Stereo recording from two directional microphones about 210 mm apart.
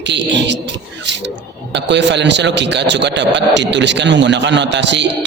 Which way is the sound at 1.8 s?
55° right (ahead or behind).